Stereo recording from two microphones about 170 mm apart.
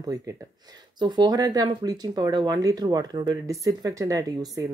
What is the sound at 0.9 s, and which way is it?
Speech, 25° right (ahead or behind).